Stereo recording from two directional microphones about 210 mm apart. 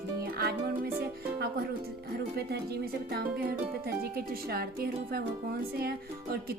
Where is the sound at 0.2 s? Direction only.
45° right (ahead or behind).